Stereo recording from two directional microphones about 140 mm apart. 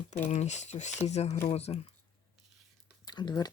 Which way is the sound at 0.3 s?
55° left (ahead or behind).